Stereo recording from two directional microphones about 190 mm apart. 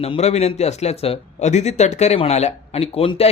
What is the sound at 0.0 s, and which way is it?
Speech, 35° left (ahead or behind).